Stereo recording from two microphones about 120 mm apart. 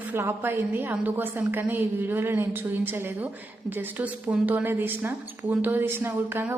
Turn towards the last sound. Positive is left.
turn(degrees=-20)  # may be behind; listen again after turning